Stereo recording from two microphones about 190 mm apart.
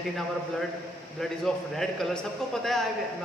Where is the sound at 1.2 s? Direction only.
Centre (ahead or behind).